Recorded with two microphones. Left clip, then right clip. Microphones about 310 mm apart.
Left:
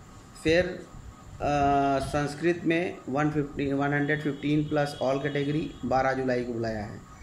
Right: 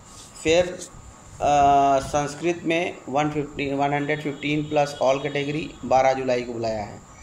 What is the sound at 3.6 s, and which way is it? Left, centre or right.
Speech, right.